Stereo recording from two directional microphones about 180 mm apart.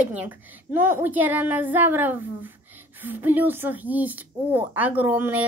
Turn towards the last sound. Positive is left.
turn(degrees=-10)  # may be behind; listen again after turning